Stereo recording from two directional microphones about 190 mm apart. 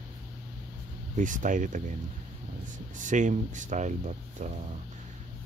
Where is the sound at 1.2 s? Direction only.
45° right (ahead or behind).